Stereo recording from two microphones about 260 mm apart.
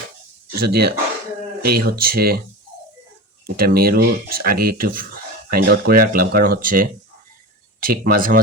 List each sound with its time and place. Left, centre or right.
0.5 s speech: right
3.4 s speech: right